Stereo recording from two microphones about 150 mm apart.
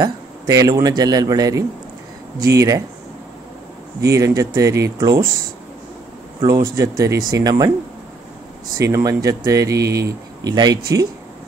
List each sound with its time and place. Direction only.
0.0 s a man's voice: 25° right (ahead or behind)
4.0 s a man's voice: 20° right (ahead or behind)
6.4 s a man's voice: 20° right (ahead or behind)
8.7 s a man's voice: 20° right (ahead or behind)